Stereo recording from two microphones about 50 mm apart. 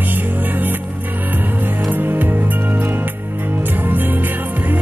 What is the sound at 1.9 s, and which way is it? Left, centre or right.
Music, right.